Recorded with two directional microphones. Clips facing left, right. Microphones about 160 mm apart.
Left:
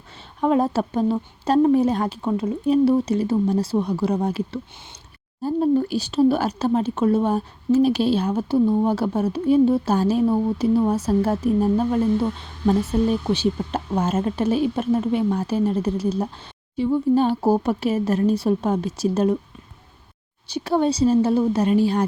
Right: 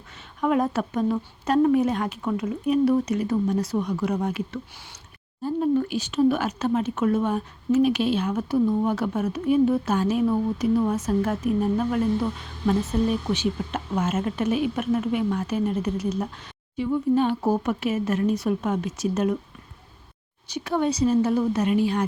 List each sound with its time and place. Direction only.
0.4 s speech: 30° left (ahead or behind)
20.5 s speech: 30° left (ahead or behind)